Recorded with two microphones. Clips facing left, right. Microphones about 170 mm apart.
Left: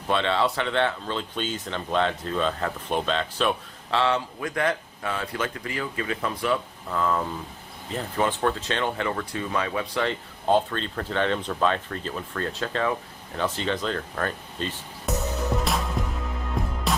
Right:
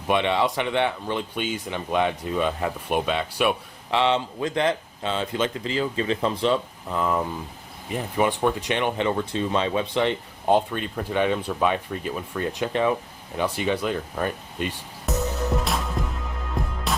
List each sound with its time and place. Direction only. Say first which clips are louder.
0.1 s speech: right 2 dB; 15° right (ahead or behind)
15.1 s music: right 2 dB; centre (ahead or behind)